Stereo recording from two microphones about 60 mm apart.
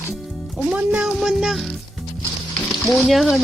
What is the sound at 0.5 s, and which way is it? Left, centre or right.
Speech, centre.